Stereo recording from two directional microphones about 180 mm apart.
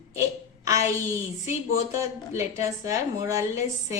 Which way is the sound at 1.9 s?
15° right (ahead or behind).